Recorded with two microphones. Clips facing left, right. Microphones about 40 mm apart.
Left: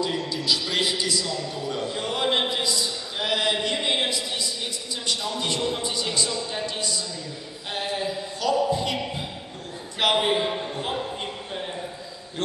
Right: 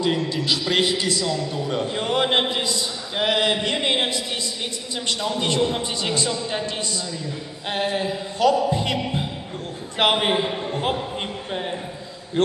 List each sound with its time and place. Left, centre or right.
0.0 s a man's voice: right
1.7 s music: right
3.2 s a sound: right
5.0 s a man's voice: right
7.7 s music: right
10.7 s a man's voice: right